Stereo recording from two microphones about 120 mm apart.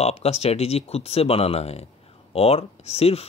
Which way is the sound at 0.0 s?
60° left (ahead or behind).